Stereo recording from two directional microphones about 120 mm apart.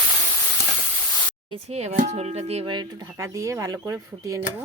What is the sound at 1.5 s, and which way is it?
Speech, 60° right (ahead or behind).